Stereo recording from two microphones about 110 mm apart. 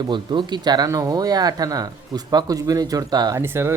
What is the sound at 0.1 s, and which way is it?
Speech, 45° right (ahead or behind).